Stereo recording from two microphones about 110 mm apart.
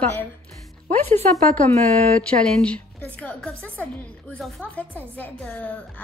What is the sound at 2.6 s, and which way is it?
A woman's voice, 10° left (ahead or behind).